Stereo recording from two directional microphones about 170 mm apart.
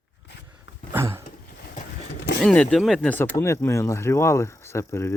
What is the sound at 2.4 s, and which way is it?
Speech, 5° left (ahead or behind).